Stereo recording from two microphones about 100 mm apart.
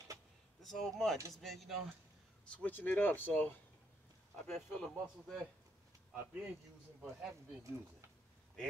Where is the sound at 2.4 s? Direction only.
15° left (ahead or behind).